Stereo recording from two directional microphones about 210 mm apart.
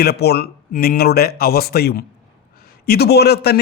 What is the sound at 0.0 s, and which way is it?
Speech, 50° left (ahead or behind).